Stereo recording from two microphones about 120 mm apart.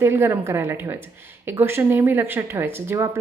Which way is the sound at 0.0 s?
20° right (ahead or behind).